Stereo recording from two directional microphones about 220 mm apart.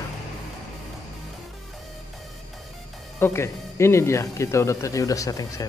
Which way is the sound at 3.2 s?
10° left (ahead or behind).